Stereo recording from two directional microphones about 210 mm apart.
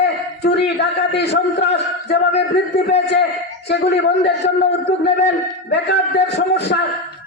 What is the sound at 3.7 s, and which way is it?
A man's voice, 55° left (ahead or behind).